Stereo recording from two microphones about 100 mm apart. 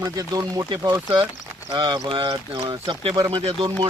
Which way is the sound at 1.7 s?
50° right (ahead or behind).